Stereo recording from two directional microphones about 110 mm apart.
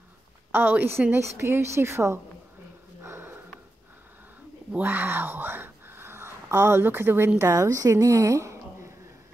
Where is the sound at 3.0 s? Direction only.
20° right (ahead or behind).